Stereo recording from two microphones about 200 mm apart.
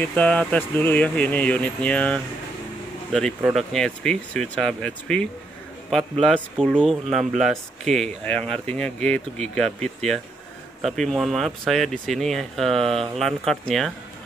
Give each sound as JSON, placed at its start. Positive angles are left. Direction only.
{"t": 0.0, "sound": "speech", "side_deg": 5}
{"t": 6.2, "sound": "speech", "side_deg": 5}